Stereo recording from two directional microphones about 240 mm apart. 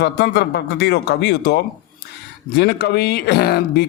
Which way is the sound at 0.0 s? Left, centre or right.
Left.